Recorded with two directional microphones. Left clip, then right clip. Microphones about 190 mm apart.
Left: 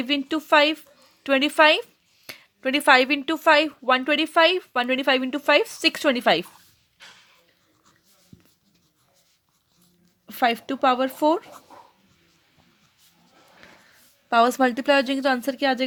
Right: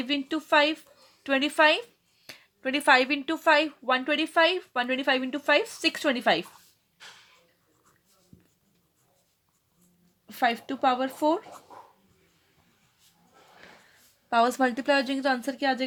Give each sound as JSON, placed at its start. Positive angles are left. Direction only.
{"t": 0.0, "sound": "speech", "side_deg": 45}
{"t": 10.2, "sound": "speech", "side_deg": 45}
{"t": 14.3, "sound": "a woman's voice", "side_deg": 40}